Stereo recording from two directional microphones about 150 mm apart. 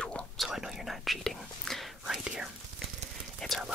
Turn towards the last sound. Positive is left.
turn(degrees=0)  # may be behind; listen again after turning